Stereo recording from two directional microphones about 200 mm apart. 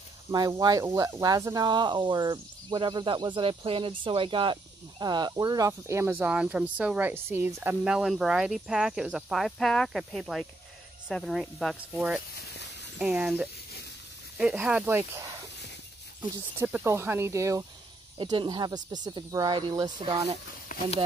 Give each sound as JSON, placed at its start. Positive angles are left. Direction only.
{"t": 0.3, "sound": "speech", "side_deg": -20}
{"t": 12.5, "sound": "a sound", "side_deg": 60}
{"t": 13.0, "sound": "speech", "side_deg": -5}
{"t": 20.7, "sound": "walk", "side_deg": 40}